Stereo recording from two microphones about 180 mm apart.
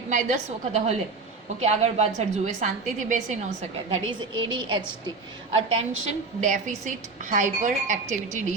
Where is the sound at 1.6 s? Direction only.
40° right (ahead or behind).